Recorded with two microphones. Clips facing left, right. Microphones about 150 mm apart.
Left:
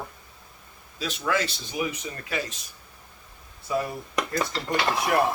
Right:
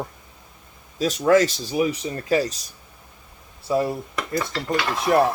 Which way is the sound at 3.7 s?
30° right (ahead or behind).